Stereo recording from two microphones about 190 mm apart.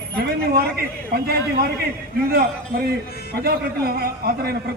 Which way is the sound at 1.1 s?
55° right (ahead or behind).